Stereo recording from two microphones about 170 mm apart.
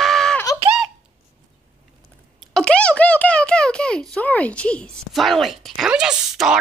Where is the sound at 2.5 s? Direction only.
5° left (ahead or behind).